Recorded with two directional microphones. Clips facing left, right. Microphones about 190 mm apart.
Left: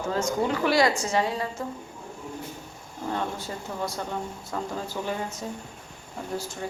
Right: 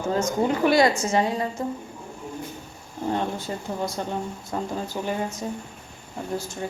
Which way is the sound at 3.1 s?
20° right (ahead or behind).